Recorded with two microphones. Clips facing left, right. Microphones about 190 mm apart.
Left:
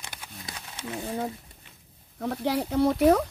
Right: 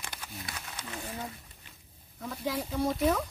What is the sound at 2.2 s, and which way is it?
Speech, 65° left (ahead or behind).